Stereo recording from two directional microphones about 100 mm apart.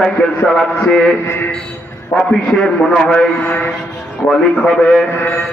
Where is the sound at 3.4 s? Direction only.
20° left (ahead or behind).